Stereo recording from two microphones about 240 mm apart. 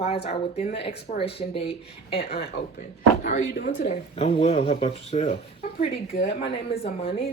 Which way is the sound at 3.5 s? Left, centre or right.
Left.